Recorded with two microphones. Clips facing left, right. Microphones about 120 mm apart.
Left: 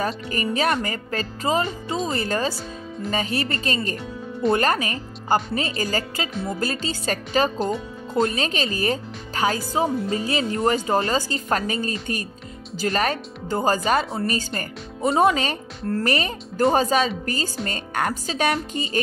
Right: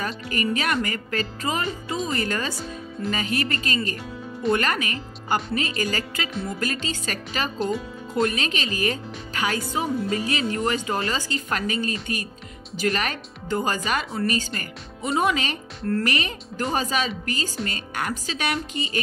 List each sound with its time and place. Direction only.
0.3 s speech: 35° left (ahead or behind)
7.5 s speech: centre (ahead or behind)
8.1 s speech: 30° left (ahead or behind)